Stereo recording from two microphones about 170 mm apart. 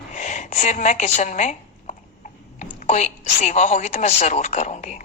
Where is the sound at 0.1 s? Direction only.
45° left (ahead or behind).